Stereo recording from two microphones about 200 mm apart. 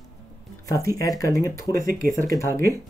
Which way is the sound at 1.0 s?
15° left (ahead or behind).